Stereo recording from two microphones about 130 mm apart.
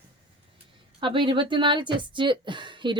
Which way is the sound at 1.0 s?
40° right (ahead or behind).